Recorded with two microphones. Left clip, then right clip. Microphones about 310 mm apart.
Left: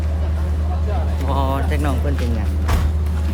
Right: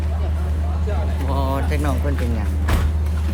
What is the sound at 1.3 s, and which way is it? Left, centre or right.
Music, centre.